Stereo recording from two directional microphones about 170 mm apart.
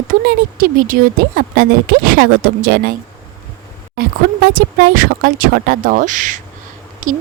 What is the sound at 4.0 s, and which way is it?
Speech, 60° right (ahead or behind).